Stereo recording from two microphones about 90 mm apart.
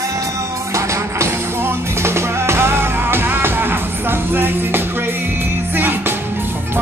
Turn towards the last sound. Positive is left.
turn(degrees=-25)  # may be behind; listen again after turning